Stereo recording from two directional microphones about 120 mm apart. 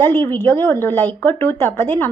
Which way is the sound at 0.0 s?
15° left (ahead or behind).